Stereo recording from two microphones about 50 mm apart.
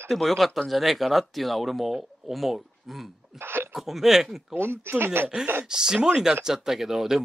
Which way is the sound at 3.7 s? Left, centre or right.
Centre.